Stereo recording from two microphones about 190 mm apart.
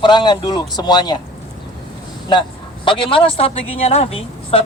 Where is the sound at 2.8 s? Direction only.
25° left (ahead or behind).